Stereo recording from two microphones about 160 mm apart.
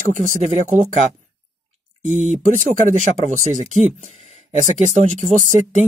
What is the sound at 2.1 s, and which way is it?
Speech, 45° right (ahead or behind).